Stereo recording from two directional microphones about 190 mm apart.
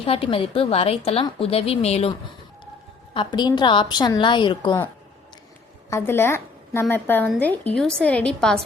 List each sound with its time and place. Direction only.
0.0 s a woman's voice: 30° left (ahead or behind)
3.2 s a woman's voice: 20° left (ahead or behind)
5.9 s a woman's voice: 10° left (ahead or behind)